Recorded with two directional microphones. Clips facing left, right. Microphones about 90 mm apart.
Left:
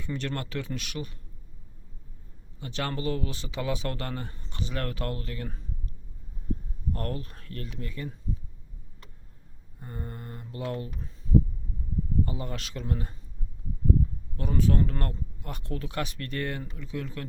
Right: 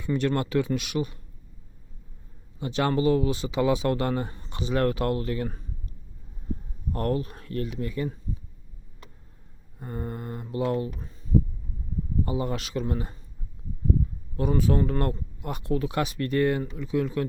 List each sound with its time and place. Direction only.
0.0 s speech: 15° right (ahead or behind)
2.6 s speech: 20° right (ahead or behind)
6.9 s speech: 15° right (ahead or behind)
9.8 s speech: 15° right (ahead or behind)
12.2 s speech: 15° right (ahead or behind)
14.3 s speech: 10° right (ahead or behind)